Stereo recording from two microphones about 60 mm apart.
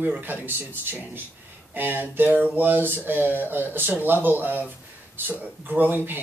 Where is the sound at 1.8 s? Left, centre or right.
Right.